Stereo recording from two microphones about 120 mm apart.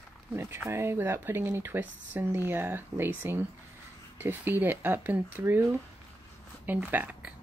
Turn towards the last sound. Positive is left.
turn(degrees=-15)  # may be behind; listen again after turning